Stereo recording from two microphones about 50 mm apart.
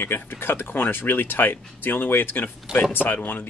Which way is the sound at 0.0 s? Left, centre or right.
Left.